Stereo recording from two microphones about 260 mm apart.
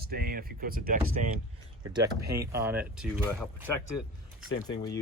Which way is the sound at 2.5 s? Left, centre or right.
Centre.